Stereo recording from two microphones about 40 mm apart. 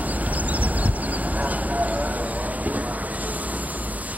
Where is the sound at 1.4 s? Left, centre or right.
Right.